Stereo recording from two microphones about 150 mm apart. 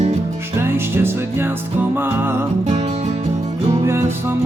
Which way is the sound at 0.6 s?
15° right (ahead or behind).